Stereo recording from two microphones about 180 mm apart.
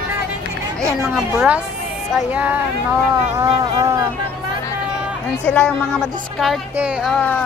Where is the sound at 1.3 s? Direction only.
5° right (ahead or behind).